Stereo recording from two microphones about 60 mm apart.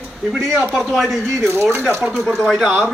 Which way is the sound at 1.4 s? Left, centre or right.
Right.